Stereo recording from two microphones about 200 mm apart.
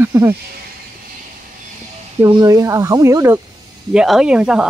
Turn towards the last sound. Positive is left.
turn(degrees=-5)  # may be behind; listen again after turning